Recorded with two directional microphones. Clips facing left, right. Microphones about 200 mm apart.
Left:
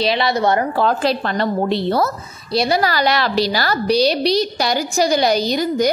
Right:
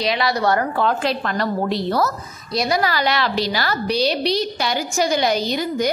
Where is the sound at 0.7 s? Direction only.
35° left (ahead or behind).